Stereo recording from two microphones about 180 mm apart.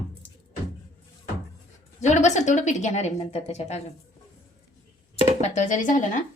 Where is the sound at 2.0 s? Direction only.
40° left (ahead or behind).